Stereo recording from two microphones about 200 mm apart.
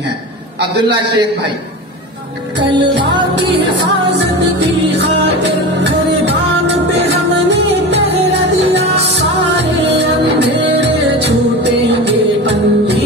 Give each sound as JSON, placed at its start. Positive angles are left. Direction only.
{"t": 2.9, "sound": "music", "side_deg": -60}
{"t": 7.4, "sound": "music", "side_deg": -60}
{"t": 11.1, "sound": "music", "side_deg": -60}